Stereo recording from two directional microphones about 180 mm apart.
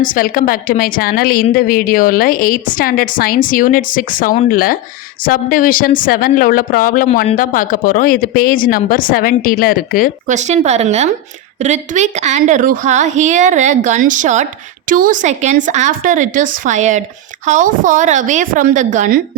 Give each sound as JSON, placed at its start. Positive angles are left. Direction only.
{"t": 0.0, "sound": "a woman's voice", "side_deg": 50}
{"t": 10.2, "sound": "a woman's voice", "side_deg": -40}